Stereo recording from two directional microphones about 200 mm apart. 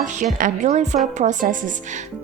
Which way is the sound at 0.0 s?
40° right (ahead or behind).